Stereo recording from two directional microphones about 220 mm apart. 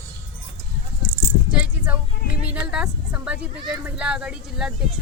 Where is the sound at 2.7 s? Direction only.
5° right (ahead or behind).